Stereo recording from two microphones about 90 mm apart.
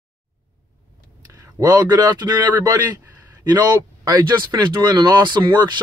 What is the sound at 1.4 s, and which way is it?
Speech, 45° right (ahead or behind).